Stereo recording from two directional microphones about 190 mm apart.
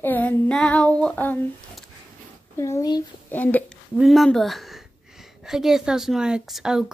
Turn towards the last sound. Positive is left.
turn(degrees=0)  # may be behind; listen again after turning